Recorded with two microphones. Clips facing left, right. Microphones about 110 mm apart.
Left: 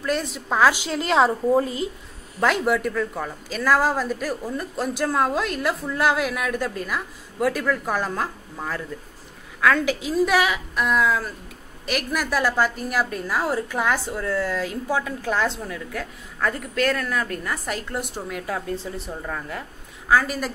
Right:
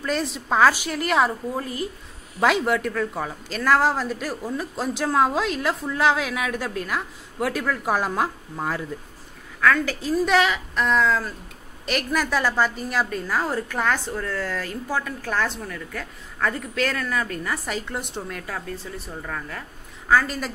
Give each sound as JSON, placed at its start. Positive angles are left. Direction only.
{"t": 0.0, "sound": "speech", "side_deg": 0}
{"t": 0.7, "sound": "a woman's voice", "side_deg": 20}
{"t": 2.4, "sound": "speech", "side_deg": 0}
{"t": 9.6, "sound": "a woman's voice", "side_deg": 15}
{"t": 16.4, "sound": "speech", "side_deg": 0}
{"t": 18.5, "sound": "a woman's voice", "side_deg": 20}